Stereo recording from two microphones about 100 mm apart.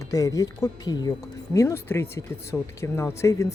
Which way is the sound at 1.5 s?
25° left (ahead or behind).